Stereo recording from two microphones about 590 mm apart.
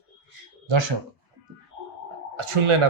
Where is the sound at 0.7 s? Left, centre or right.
Right.